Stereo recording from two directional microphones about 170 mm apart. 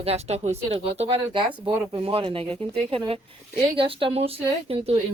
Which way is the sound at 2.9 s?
35° right (ahead or behind).